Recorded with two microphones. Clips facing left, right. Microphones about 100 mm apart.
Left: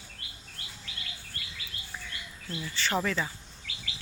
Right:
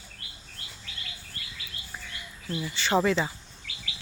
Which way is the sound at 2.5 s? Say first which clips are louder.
Right 5 dB; 15° right (ahead or behind).